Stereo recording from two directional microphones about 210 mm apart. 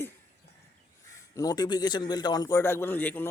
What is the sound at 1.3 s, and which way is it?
A man's voice, 15° left (ahead or behind).